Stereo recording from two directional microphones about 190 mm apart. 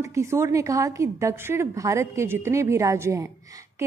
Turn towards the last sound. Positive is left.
turn(degrees=-15)  # may be behind; listen again after turning